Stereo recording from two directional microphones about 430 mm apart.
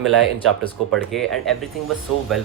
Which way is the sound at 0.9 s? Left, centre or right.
Centre.